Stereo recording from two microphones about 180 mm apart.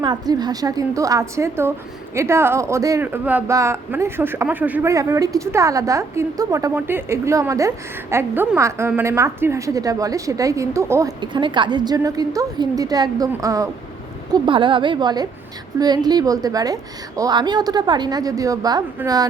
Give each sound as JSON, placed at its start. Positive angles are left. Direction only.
{"t": 0.0, "sound": "a woman's voice", "side_deg": -25}